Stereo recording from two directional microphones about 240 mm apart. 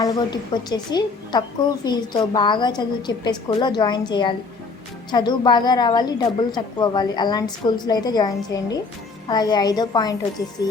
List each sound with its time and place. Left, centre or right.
0.0 s a woman's voice: centre